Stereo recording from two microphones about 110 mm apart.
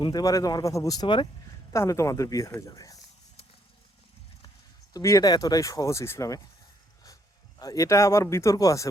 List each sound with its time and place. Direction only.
0.0 s speech: 35° left (ahead or behind)
1.0 s speech: 50° left (ahead or behind)
1.7 s speech: 25° left (ahead or behind)
4.9 s speech: 30° left (ahead or behind)
7.6 s speech: 30° left (ahead or behind)